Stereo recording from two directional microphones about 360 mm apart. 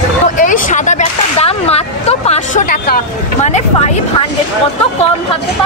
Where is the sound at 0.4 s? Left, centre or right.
Left.